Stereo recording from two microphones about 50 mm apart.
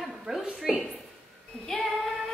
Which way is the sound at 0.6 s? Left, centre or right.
Centre.